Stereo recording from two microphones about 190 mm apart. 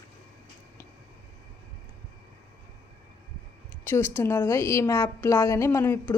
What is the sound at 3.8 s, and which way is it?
Speech, 10° left (ahead or behind).